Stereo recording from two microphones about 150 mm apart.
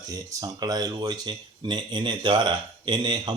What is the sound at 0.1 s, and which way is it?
Speech, 20° right (ahead or behind).